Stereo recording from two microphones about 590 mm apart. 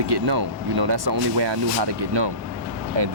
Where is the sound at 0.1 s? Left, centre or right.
Right.